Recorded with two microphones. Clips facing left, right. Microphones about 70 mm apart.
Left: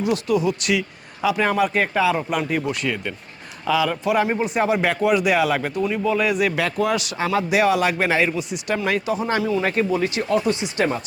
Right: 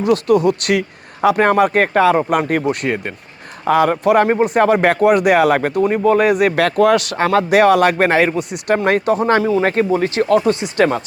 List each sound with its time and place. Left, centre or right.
0.0 s speech: right
10.2 s speech: right